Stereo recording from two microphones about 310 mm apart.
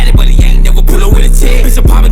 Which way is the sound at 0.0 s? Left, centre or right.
Centre.